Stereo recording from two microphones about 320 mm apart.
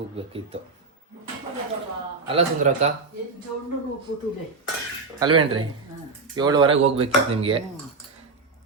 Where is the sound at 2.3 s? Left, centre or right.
Centre.